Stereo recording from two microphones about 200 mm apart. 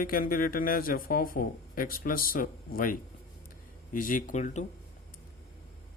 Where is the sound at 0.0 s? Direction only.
45° left (ahead or behind).